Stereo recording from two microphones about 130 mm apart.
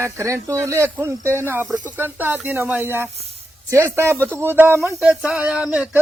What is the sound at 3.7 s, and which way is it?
Speech, 20° right (ahead or behind).